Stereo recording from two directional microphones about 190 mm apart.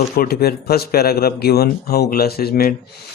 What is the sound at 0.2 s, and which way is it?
Speech, 55° left (ahead or behind).